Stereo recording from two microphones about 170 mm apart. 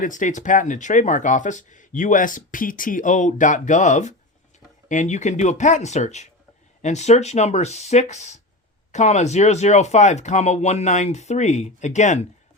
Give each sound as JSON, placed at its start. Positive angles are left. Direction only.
{"t": 0.0, "sound": "speech", "side_deg": 50}